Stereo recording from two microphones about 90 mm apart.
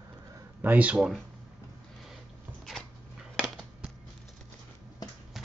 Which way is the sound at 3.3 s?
Centre (ahead or behind).